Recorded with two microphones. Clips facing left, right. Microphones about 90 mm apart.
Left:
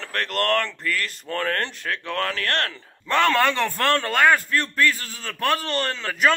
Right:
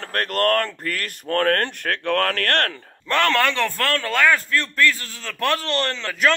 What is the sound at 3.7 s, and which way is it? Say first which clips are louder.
A man's voice: left 1 dB; 25° left (ahead or behind).